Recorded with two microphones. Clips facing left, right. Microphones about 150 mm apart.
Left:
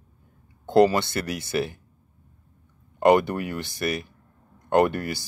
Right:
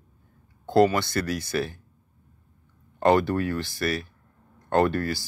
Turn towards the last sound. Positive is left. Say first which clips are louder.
# left 1 dB
turn(degrees=20)  # may be behind; listen again after turning